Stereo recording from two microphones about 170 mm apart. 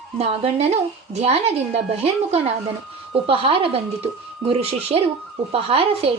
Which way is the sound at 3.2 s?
30° right (ahead or behind).